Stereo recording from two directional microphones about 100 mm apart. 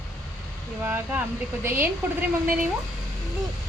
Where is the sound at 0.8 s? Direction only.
25° right (ahead or behind).